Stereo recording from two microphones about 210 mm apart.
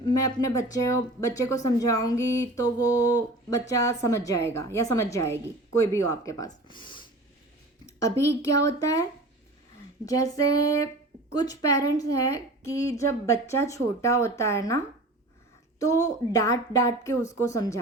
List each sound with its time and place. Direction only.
0.0 s speech: 20° left (ahead or behind)
10.1 s speech: 15° left (ahead or behind)
15.8 s speech: 15° left (ahead or behind)